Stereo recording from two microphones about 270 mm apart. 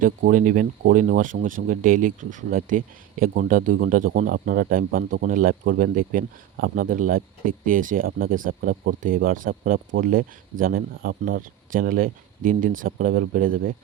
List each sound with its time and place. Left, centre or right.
0.3 s speech: right